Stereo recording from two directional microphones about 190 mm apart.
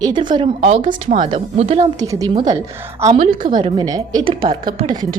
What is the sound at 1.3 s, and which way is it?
Speech, 30° right (ahead or behind).